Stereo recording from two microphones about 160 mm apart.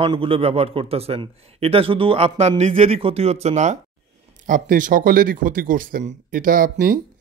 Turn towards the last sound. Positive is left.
turn(degrees=-60)  # may be behind; listen again after turning